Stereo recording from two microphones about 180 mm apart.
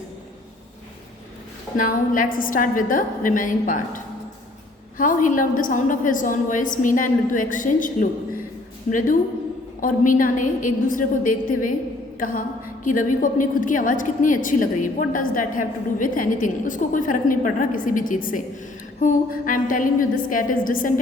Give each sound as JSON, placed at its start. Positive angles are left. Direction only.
{"t": 1.7, "sound": "a woman's voice", "side_deg": 50}